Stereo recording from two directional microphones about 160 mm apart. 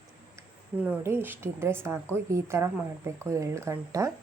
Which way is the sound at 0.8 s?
10° right (ahead or behind).